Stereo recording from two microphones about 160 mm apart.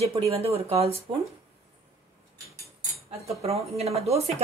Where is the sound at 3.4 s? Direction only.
40° right (ahead or behind).